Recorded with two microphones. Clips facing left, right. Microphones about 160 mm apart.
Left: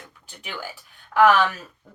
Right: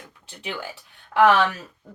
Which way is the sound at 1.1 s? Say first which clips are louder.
Even; 25° right (ahead or behind).